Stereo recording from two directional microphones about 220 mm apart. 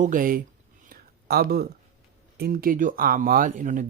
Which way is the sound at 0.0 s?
40° right (ahead or behind).